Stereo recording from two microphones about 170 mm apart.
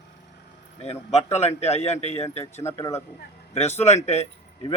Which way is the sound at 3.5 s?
40° left (ahead or behind).